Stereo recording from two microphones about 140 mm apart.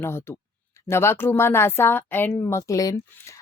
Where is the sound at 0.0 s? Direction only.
15° left (ahead or behind).